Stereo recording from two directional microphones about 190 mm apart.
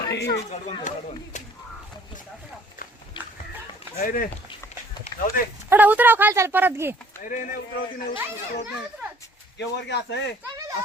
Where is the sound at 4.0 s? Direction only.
50° left (ahead or behind).